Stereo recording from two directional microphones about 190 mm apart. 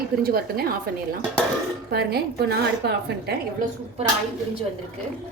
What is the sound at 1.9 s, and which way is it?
A woman's voice, 55° right (ahead or behind).